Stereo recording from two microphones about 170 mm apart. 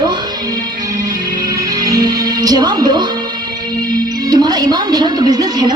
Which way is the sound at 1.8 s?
25° right (ahead or behind).